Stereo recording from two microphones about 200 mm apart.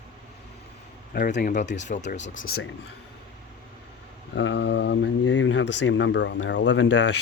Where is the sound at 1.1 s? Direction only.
40° left (ahead or behind).